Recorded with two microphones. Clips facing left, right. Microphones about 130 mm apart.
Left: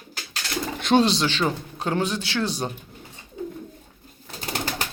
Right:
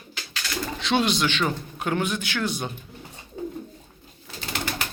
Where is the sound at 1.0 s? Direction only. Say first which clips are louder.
Left 1 dB; 35° left (ahead or behind).